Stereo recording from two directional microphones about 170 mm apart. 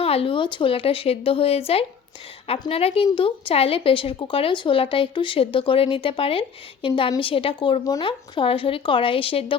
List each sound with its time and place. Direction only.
0.0 s a woman's voice: 35° left (ahead or behind)